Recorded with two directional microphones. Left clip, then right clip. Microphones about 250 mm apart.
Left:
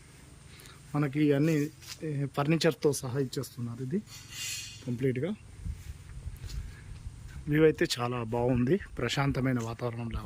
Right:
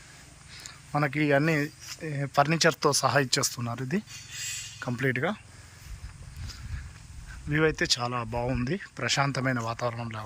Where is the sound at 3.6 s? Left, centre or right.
Right.